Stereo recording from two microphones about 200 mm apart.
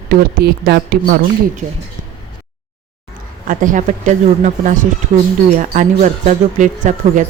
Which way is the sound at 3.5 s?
40° right (ahead or behind).